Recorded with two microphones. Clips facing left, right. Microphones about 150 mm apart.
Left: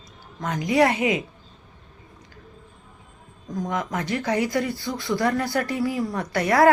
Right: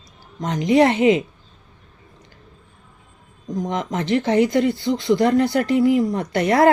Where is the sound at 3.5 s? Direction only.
20° right (ahead or behind).